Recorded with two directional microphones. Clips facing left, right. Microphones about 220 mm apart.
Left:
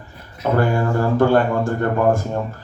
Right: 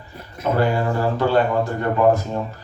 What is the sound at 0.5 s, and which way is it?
Speech, 50° left (ahead or behind).